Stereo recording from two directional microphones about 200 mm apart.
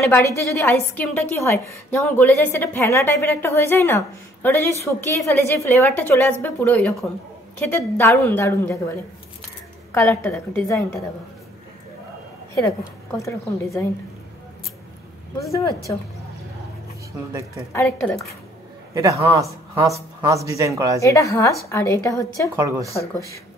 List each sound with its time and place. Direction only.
0.1 s a woman's voice: 10° left (ahead or behind)
9.9 s a woman's voice: 15° left (ahead or behind)
13.2 s a woman's voice: 15° left (ahead or behind)
17.3 s speech: 15° right (ahead or behind)
17.7 s a woman's voice: 10° left (ahead or behind)
18.9 s speech: 15° right (ahead or behind)
21.0 s a woman's voice: 15° left (ahead or behind)
22.6 s speech: 15° right (ahead or behind)